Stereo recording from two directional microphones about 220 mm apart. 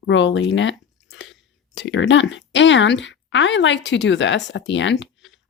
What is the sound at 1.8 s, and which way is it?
Speech, 55° left (ahead or behind).